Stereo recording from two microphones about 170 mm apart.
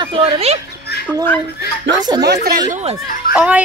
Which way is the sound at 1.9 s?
25° right (ahead or behind).